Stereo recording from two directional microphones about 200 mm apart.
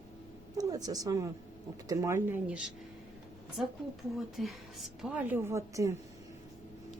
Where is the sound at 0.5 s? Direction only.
20° right (ahead or behind).